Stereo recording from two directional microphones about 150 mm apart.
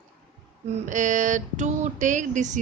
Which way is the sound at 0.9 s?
55° right (ahead or behind).